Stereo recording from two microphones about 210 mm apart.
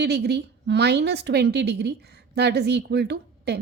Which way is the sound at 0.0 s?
50° right (ahead or behind).